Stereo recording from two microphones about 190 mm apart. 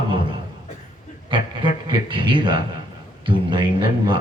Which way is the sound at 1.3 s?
25° right (ahead or behind).